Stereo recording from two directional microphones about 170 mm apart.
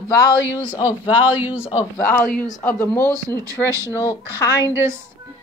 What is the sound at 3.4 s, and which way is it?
Speech, 20° right (ahead or behind).